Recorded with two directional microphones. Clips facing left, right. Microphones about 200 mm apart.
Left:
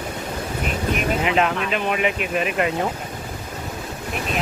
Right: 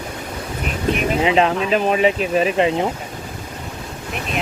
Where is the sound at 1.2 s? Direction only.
30° right (ahead or behind).